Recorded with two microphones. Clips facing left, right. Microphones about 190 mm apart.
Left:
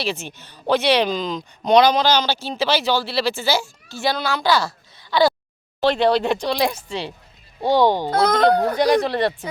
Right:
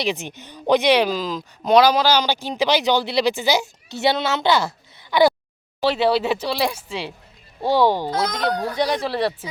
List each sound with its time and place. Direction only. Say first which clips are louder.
0.0 s speech: right 2 dB; 15° right (ahead or behind)
5.8 s speech: left 1 dB; 5° right (ahead or behind)
8.1 s speech: left 6 dB; 55° left (ahead or behind)
9.0 s speech: left 3 dB; centre (ahead or behind)